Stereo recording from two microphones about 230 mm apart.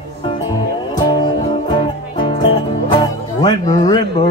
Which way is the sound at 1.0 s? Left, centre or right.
Centre.